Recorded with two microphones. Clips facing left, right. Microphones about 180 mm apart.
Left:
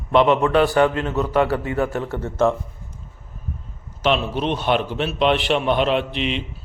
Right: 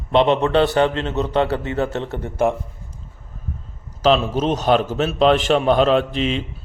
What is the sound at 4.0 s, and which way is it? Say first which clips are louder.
A man's voice: right 4 dB; 40° right (ahead or behind).